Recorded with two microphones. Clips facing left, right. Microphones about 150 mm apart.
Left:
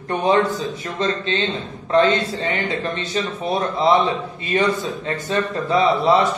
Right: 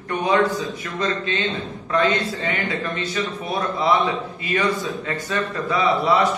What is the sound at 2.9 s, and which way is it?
Speech, 25° left (ahead or behind).